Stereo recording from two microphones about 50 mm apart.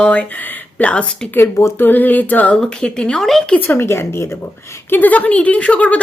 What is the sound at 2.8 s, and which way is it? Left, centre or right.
Speech, centre.